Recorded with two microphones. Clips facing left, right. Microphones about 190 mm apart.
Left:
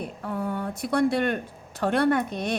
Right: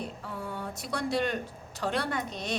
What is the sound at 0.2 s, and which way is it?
A woman's voice, 55° left (ahead or behind).